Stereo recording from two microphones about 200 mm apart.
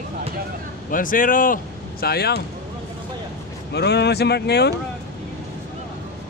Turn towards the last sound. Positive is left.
turn(degrees=55)  # may be behind; listen again after turning